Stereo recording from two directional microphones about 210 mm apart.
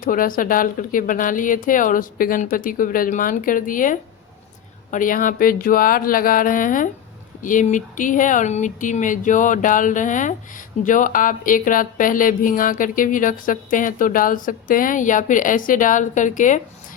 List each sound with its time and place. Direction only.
0.0 s speech: 40° left (ahead or behind)